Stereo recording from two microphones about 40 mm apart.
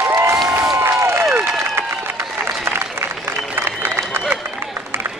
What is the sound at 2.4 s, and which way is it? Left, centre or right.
Applause, right.